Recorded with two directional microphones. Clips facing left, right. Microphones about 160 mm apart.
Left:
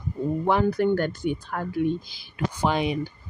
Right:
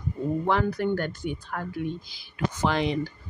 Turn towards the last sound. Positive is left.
turn(degrees=15)  # may be behind; listen again after turning